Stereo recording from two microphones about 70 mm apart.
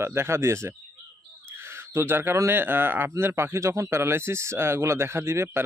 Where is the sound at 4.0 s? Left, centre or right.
Right.